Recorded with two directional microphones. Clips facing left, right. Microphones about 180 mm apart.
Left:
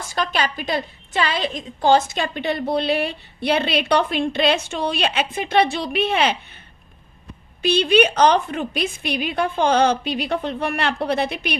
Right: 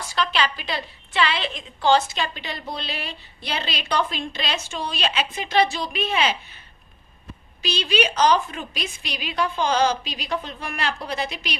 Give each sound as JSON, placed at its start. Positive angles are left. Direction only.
{"t": 0.1, "sound": "a woman's voice", "side_deg": 45}
{"t": 7.6, "sound": "a woman's voice", "side_deg": 55}